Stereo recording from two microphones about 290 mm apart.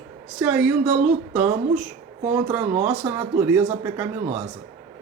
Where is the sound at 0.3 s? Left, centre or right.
Centre.